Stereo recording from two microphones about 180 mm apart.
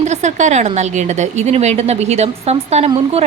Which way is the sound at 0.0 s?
40° right (ahead or behind).